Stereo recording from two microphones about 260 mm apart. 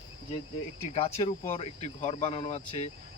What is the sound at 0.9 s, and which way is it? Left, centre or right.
Speech, left.